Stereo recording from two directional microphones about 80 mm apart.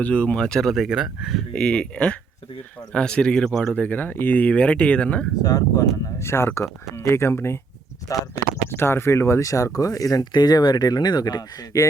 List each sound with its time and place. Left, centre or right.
0.0 s speech: centre
1.5 s speech: centre
3.8 s speech: left
5.4 s speech: left
6.1 s speech: left
8.1 s speech: left
8.7 s speech: left